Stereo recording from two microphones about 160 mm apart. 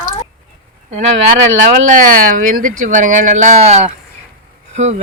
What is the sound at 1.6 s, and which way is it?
Speech, 50° right (ahead or behind).